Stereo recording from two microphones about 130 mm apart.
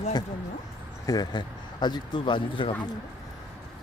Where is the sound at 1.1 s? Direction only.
30° left (ahead or behind).